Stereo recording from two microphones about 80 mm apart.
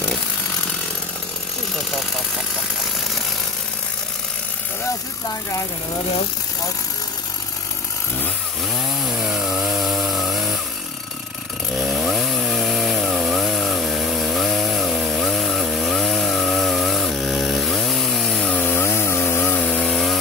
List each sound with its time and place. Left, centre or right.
9.3 s chainsaw: centre
12.0 s chainsaw: centre
18.5 s chainsaw: left
19.5 s chainsaw: centre